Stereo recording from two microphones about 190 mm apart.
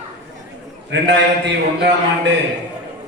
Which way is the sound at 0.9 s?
65° right (ahead or behind).